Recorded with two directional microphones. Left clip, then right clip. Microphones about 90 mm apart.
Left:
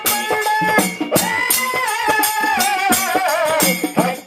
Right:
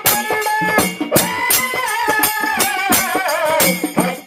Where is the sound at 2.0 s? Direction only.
35° left (ahead or behind).